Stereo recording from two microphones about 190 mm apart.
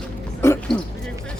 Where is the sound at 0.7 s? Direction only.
5° left (ahead or behind).